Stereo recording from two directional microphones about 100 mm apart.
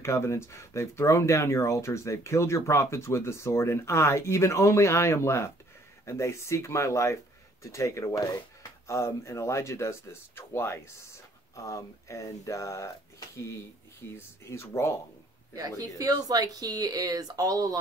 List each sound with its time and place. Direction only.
0.0 s speech: 30° left (ahead or behind)
14.1 s speech: 25° left (ahead or behind)
16.0 s speech: 35° right (ahead or behind)